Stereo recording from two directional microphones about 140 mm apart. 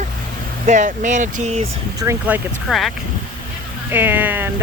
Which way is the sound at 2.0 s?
20° right (ahead or behind).